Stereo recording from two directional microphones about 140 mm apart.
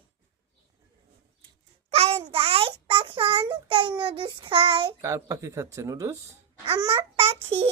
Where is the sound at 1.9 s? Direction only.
45° right (ahead or behind).